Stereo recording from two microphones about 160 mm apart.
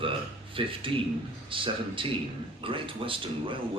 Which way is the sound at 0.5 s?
35° right (ahead or behind).